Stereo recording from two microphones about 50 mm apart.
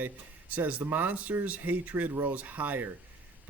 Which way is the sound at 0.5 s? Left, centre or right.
Right.